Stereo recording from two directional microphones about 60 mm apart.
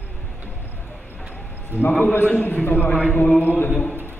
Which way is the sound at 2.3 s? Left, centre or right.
Left.